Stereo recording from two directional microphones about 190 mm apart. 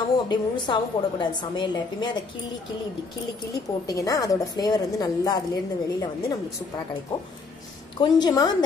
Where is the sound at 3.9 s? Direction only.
20° left (ahead or behind).